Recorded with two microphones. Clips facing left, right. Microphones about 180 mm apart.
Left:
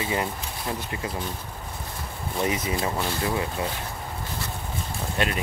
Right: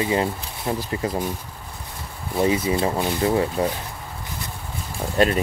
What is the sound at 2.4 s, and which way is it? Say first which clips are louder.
Speech: right 6 dB; 25° right (ahead or behind).